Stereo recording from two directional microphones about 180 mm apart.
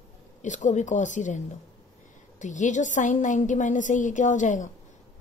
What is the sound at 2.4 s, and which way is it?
A woman's voice, 45° left (ahead or behind).